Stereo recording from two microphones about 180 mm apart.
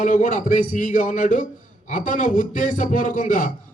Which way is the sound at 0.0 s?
45° left (ahead or behind).